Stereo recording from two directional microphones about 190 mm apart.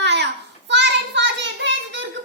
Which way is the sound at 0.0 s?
65° right (ahead or behind).